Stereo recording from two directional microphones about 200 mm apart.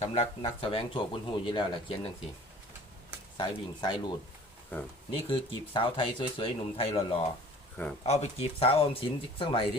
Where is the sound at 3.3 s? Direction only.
20° left (ahead or behind).